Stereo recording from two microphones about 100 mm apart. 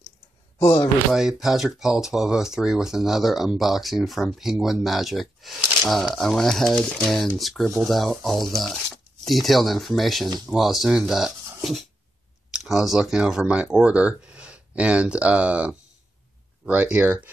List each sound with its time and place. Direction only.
1.1 s speech: 5° right (ahead or behind)